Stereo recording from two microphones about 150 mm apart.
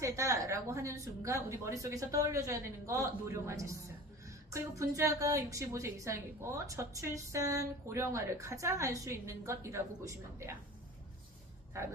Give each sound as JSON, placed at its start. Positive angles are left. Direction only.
{"t": 0.0, "sound": "a woman's voice", "side_deg": -20}